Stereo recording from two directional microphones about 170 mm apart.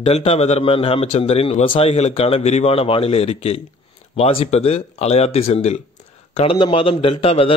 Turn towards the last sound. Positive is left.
turn(degrees=35)  # may be behind; listen again after turning